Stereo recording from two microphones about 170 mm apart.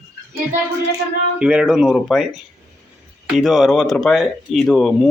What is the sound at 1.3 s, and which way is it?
Speech, 5° right (ahead or behind).